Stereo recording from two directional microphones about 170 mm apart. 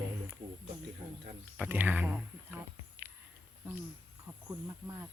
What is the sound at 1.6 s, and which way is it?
Speech, 10° right (ahead or behind).